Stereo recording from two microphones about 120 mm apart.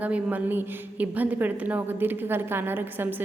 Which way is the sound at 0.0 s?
15° right (ahead or behind).